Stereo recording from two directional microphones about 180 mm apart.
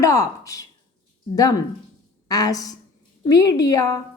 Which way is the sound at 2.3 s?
20° left (ahead or behind).